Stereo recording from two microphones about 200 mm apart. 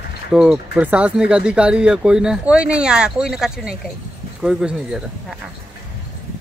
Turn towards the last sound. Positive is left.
turn(degrees=-5)  # may be behind; listen again after turning